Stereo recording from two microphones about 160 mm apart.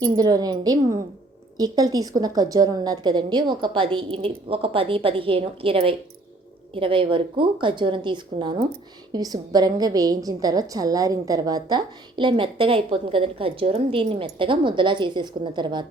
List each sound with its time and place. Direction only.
0.0 s a woman's voice: 25° right (ahead or behind)